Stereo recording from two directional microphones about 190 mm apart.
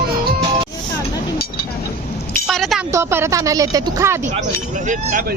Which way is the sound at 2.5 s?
Centre (ahead or behind).